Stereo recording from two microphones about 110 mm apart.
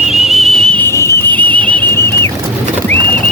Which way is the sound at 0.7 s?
25° left (ahead or behind).